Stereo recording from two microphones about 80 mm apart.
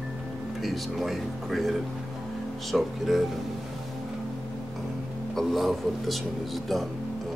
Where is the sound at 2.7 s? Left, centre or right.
Centre.